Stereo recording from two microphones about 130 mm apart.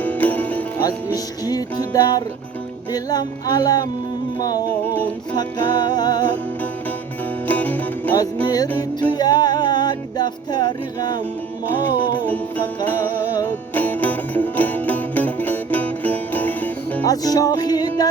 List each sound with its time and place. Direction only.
0.0 s music: 10° left (ahead or behind)
1.1 s music: 30° left (ahead or behind)
7.4 s music: 15° left (ahead or behind)
8.4 s music: 30° left (ahead or behind)
12.2 s music: 15° left (ahead or behind)
17.1 s music: 30° left (ahead or behind)